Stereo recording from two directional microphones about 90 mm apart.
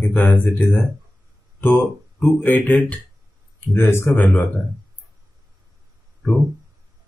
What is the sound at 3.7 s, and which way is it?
Speech, 30° left (ahead or behind).